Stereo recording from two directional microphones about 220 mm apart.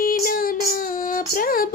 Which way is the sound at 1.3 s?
40° left (ahead or behind).